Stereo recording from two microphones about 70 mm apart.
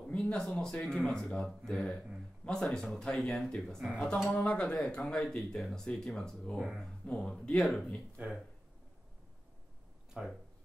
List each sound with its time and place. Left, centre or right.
0.0 s speech: centre
4.3 s speech: centre
10.1 s speech: right